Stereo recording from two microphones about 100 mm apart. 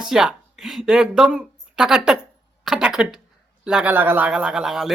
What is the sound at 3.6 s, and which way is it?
Speech, 10° right (ahead or behind).